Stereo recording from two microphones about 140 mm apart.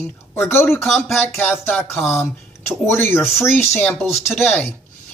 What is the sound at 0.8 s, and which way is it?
Speech, centre (ahead or behind).